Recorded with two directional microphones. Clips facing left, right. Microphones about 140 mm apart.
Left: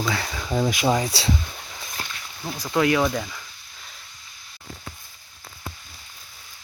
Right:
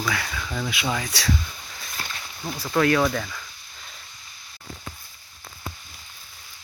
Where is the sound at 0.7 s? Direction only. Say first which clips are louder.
Left 6 dB; 40° left (ahead or behind).